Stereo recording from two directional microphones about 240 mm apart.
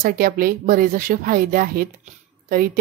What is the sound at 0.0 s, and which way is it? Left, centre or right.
Speech, right.